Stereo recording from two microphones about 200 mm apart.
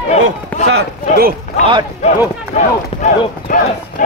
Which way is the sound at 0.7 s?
50° right (ahead or behind).